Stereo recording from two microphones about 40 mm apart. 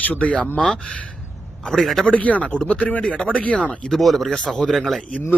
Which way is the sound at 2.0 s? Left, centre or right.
Left.